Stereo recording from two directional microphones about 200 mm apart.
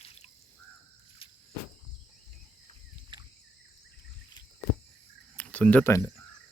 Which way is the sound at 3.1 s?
25° right (ahead or behind).